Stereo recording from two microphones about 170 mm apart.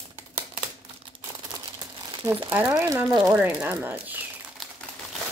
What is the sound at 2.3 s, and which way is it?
Speech, 15° right (ahead or behind).